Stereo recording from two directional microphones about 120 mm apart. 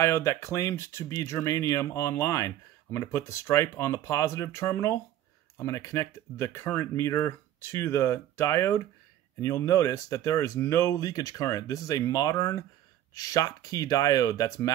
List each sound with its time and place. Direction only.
0.0 s speech: 25° left (ahead or behind)